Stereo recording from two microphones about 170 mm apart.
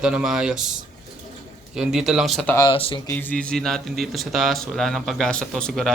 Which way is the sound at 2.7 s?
30° left (ahead or behind).